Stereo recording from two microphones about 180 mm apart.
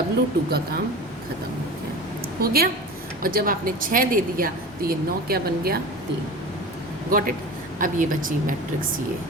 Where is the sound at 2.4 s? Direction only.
55° right (ahead or behind).